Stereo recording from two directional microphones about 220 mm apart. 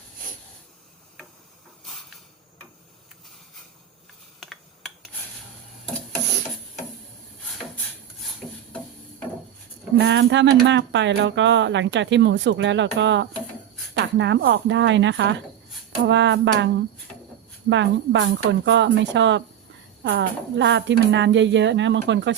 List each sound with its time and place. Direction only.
1.8 s hiss: centre (ahead or behind)
4.4 s mechanisms: centre (ahead or behind)
10.0 s speech: 55° right (ahead or behind)
17.7 s speech: 55° right (ahead or behind)